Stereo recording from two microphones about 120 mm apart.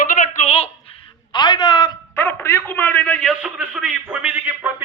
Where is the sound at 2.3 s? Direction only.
20° left (ahead or behind).